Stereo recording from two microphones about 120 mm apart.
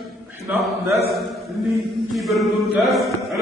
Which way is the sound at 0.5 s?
Centre (ahead or behind).